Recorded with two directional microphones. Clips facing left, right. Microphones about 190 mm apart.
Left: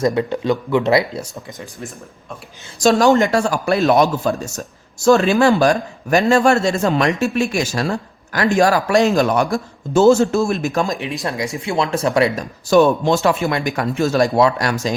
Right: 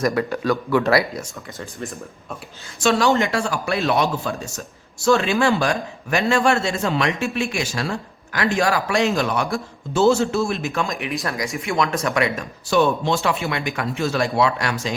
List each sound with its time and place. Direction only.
0.0 s speech: 20° left (ahead or behind)
2.8 s speech: 45° left (ahead or behind)